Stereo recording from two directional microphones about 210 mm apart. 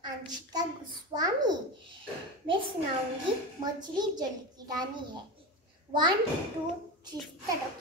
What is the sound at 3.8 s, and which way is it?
A child's voice, 20° right (ahead or behind).